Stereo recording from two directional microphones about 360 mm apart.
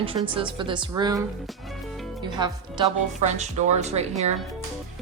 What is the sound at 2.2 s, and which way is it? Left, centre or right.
Speech, centre.